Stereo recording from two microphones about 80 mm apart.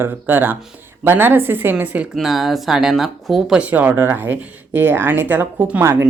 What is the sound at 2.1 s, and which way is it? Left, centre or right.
Speech, centre.